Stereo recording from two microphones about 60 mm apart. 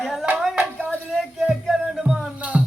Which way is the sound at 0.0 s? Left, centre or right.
Centre.